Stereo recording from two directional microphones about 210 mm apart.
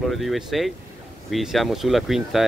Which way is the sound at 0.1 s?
Centre (ahead or behind).